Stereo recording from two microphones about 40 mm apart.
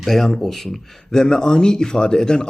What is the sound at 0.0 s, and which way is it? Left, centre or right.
A man's voice, centre.